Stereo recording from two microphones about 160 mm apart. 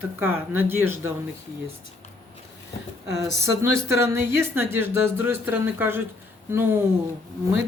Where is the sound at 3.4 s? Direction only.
20° right (ahead or behind).